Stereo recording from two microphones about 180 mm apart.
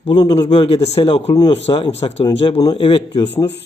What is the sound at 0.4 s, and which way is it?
Speech, 35° left (ahead or behind).